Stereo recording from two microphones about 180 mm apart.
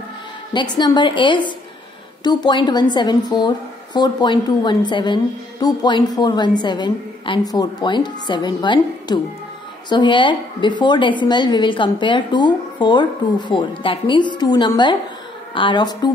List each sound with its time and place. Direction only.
0.5 s a woman's voice: 25° left (ahead or behind)